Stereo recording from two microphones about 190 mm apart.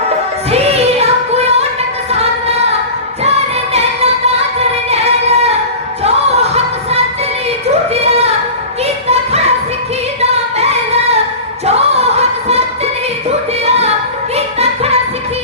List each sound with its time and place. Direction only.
0.5 s music: 35° right (ahead or behind)
3.2 s music: 35° right (ahead or behind)
4.9 s singing: 35° right (ahead or behind)
6.0 s music: 35° right (ahead or behind)
10.6 s singing: 35° right (ahead or behind)
11.6 s a sound: 35° right (ahead or behind)
13.7 s music: 35° right (ahead or behind)